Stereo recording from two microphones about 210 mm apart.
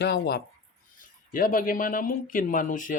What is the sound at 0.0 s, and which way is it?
Speech, 50° left (ahead or behind).